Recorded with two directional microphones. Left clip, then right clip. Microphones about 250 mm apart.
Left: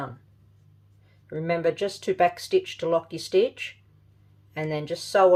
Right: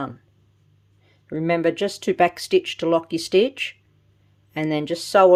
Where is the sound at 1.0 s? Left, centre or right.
Right.